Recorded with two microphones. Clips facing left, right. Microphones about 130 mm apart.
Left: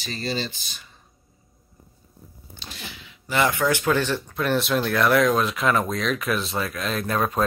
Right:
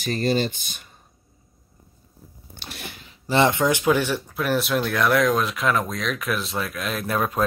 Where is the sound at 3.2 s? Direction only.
25° right (ahead or behind).